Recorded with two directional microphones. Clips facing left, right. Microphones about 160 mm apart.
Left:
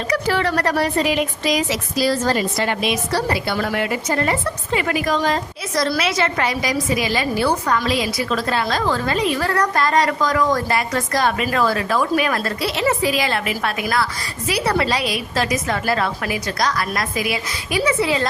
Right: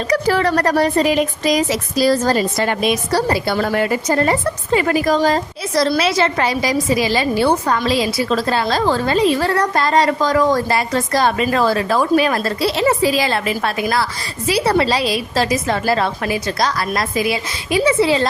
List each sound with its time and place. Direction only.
0.1 s a woman's voice: 40° right (ahead or behind)